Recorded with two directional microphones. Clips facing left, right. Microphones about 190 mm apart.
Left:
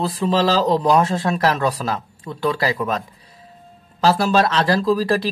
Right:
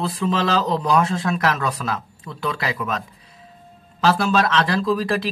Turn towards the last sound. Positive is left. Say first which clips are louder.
# left 3 dB
turn(degrees=35)  # may be behind; listen again after turning